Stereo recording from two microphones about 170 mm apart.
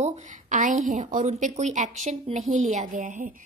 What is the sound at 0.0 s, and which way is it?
A woman's voice, 50° right (ahead or behind).